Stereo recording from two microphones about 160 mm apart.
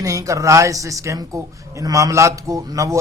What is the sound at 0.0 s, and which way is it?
A man's voice, 20° right (ahead or behind).